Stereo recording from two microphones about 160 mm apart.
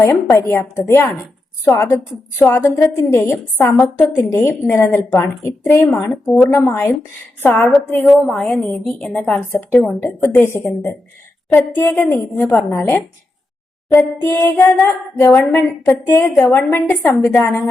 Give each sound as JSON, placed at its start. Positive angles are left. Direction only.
{"t": 0.0, "sound": "speech", "side_deg": 20}
{"t": 3.9, "sound": "a woman's voice", "side_deg": -5}
{"t": 4.3, "sound": "speech", "side_deg": 15}
{"t": 6.2, "sound": "a woman's voice", "side_deg": 0}
{"t": 6.5, "sound": "speech", "side_deg": 15}
{"t": 8.0, "sound": "a woman's voice", "side_deg": 0}
{"t": 9.5, "sound": "speech", "side_deg": 15}